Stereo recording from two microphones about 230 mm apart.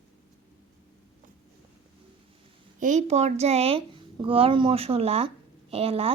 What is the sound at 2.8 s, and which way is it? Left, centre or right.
A woman's voice, right.